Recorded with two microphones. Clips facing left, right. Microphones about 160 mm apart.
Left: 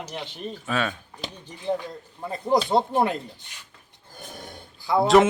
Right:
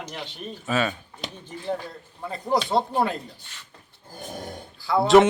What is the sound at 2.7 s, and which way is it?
Speech, 20° left (ahead or behind).